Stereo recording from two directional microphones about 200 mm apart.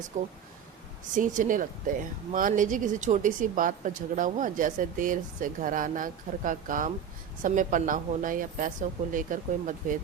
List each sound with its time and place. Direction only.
0.1 s speech: 35° right (ahead or behind)